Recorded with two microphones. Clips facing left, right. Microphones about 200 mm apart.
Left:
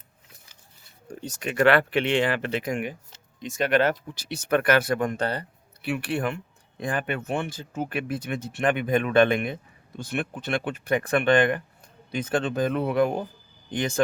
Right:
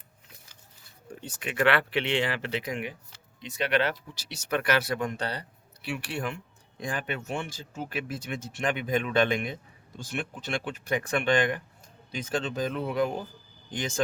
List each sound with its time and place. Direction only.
1.2 s speech: 40° left (ahead or behind); by 14.0 s 60° left (ahead or behind)